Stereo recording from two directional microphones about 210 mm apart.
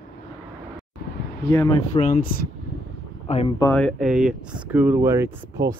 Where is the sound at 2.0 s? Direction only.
35° left (ahead or behind).